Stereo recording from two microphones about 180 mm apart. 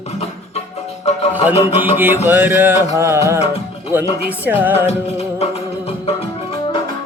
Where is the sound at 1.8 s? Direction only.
10° right (ahead or behind).